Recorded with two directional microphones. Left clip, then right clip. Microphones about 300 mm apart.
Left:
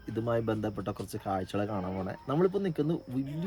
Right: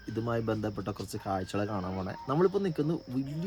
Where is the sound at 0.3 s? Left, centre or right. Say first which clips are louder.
Left 2 dB; centre.